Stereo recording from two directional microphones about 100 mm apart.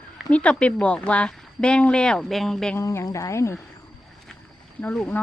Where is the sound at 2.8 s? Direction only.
30° left (ahead or behind).